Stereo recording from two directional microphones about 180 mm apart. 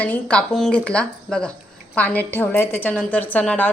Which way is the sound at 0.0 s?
5° left (ahead or behind).